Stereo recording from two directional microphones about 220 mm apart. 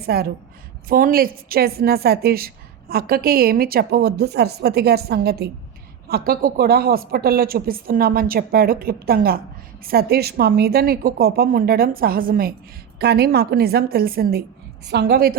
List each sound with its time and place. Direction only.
0.0 s a woman's voice: 45° right (ahead or behind)